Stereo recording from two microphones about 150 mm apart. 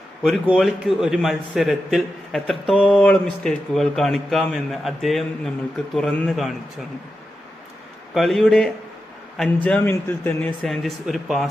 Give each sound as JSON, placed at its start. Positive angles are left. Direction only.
{"t": 0.2, "sound": "a man's voice", "side_deg": 0}
{"t": 3.0, "sound": "a man's voice", "side_deg": 5}
{"t": 8.1, "sound": "a man's voice", "side_deg": 0}